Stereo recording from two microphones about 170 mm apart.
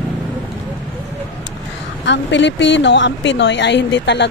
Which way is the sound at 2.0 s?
90° left.